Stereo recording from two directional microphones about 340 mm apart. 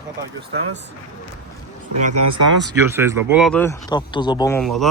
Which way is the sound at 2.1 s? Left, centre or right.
Right.